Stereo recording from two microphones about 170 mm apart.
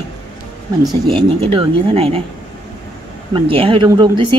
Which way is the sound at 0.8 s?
20° right (ahead or behind).